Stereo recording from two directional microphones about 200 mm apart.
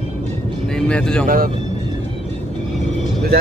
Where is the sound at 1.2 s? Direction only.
45° right (ahead or behind).